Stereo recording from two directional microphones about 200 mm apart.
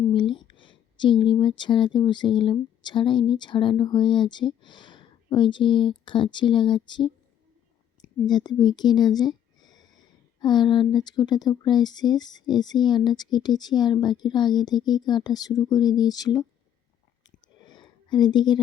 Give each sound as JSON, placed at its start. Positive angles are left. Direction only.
{"t": 0.1, "sound": "speech", "side_deg": 25}
{"t": 8.3, "sound": "speech", "side_deg": 20}
{"t": 17.2, "sound": "a sound", "side_deg": 20}